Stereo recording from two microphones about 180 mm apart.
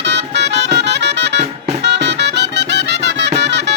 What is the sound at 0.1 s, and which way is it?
Music, 70° right (ahead or behind).